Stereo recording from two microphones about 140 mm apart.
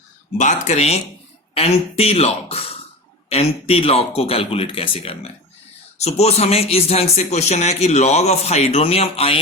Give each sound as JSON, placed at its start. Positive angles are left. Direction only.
{"t": 0.3, "sound": "speech", "side_deg": 60}